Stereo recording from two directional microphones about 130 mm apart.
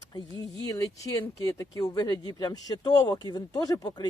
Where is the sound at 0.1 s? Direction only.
30° left (ahead or behind).